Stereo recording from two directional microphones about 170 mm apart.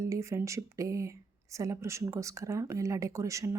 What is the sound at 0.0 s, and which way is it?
Speech, 15° right (ahead or behind).